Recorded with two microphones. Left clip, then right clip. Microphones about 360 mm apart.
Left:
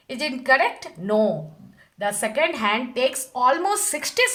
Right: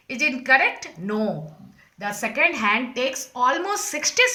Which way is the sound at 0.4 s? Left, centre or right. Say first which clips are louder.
Even; centre.